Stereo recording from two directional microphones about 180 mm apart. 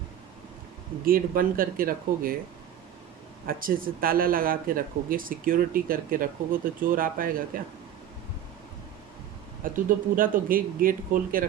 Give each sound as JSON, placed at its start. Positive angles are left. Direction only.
{"t": 1.0, "sound": "speech", "side_deg": -50}
{"t": 3.4, "sound": "speech", "side_deg": -55}
{"t": 9.6, "sound": "speech", "side_deg": -50}